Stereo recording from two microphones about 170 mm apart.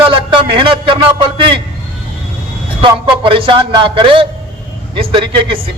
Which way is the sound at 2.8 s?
30° right (ahead or behind).